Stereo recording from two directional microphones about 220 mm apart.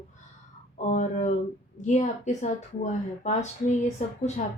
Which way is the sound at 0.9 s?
35° left (ahead or behind).